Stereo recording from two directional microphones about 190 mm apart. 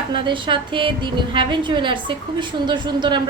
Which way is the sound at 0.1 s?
25° right (ahead or behind).